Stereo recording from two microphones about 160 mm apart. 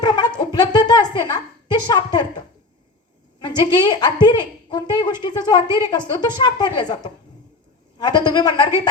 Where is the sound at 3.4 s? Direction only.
30° left (ahead or behind).